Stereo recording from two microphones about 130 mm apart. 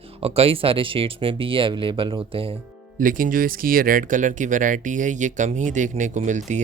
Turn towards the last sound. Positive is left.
turn(degrees=-70)  # may be behind; listen again after turning